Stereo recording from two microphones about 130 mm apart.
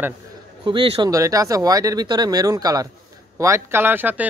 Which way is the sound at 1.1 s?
25° right (ahead or behind).